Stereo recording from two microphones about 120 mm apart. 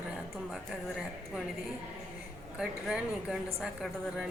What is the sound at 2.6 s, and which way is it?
A woman's voice, 5° right (ahead or behind).